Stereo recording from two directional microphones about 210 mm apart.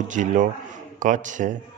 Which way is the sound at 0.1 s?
35° right (ahead or behind).